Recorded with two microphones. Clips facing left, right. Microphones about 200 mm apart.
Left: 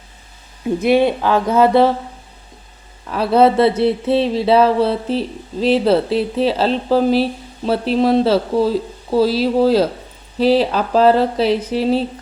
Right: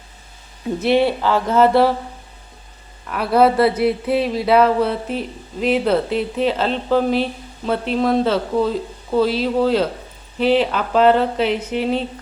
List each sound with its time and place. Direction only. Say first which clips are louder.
0.8 s speech: left 2 dB; 15° left (ahead or behind)
3.1 s speech: left 2 dB; 25° left (ahead or behind)